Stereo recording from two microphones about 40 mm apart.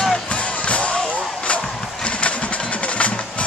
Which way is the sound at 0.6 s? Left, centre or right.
Left.